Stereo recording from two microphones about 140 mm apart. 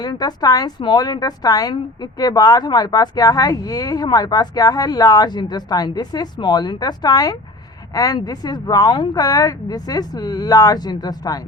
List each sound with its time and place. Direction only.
0.0 s a woman's voice: 30° left (ahead or behind)